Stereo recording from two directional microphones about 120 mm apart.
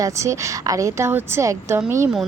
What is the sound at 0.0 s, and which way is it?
A woman's voice, 25° right (ahead or behind).